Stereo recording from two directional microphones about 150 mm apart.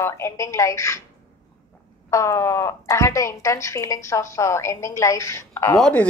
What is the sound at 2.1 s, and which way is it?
Speech, 20° left (ahead or behind).